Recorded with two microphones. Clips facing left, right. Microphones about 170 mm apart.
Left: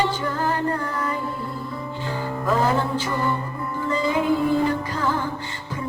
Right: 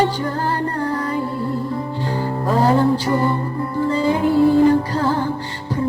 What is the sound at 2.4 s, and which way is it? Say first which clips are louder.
Music: right 6 dB; 35° right (ahead or behind).